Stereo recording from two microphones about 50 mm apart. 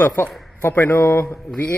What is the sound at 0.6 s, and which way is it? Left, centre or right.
Speech, left.